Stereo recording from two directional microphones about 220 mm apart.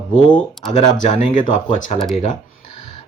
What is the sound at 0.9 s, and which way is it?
Speech, 35° left (ahead or behind).